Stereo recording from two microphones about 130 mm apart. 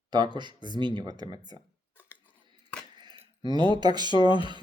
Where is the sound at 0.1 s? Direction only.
35° right (ahead or behind).